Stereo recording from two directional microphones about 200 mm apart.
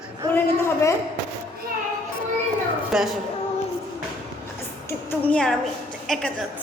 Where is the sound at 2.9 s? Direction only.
5° right (ahead or behind).